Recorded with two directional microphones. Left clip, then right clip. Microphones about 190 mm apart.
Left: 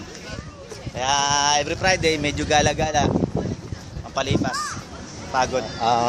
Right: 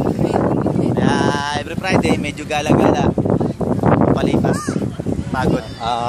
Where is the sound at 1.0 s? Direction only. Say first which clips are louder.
Left 1 dB; 5° left (ahead or behind).